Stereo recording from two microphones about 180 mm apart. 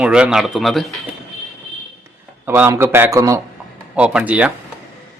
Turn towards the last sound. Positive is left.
turn(degrees=-5)  # may be behind; listen again after turning